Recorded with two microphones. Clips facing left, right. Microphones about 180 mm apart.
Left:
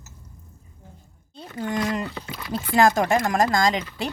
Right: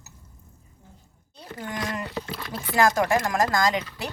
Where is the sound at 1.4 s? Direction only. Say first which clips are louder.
Left 6 dB; 25° left (ahead or behind).